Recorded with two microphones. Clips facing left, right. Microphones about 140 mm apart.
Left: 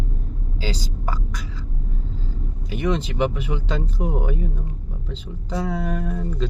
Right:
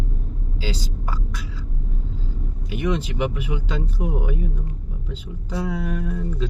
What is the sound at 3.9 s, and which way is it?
Speech, 40° left (ahead or behind).